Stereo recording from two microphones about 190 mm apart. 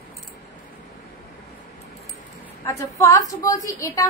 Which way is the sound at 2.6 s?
15° left (ahead or behind).